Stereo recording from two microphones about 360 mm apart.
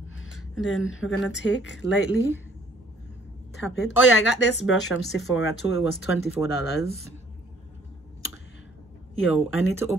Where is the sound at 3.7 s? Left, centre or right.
Left.